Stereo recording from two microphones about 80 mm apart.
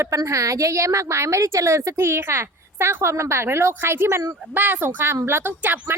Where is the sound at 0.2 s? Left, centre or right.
Right.